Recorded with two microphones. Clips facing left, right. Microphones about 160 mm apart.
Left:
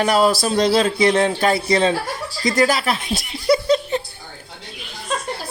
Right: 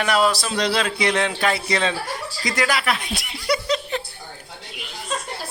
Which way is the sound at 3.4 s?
25° left (ahead or behind).